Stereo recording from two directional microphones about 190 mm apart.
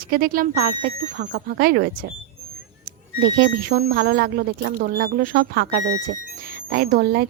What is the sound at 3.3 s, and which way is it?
Speech, 50° right (ahead or behind).